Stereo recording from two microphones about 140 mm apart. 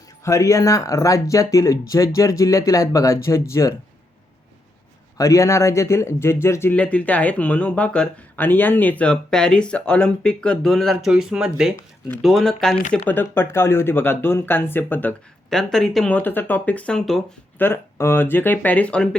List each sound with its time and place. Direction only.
0.3 s speech: 25° left (ahead or behind)
5.1 s speech: 20° left (ahead or behind); by 12.7 s 5° left (ahead or behind)
13.1 s speech: 15° left (ahead or behind)
17.6 s speech: 15° left (ahead or behind)